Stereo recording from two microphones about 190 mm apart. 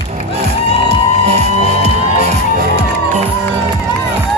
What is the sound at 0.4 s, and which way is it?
Music, 35° right (ahead or behind).